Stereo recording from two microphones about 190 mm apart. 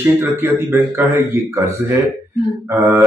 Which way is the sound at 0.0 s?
10° right (ahead or behind).